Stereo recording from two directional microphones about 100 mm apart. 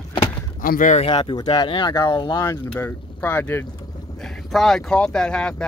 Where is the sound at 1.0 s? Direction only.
50° left (ahead or behind).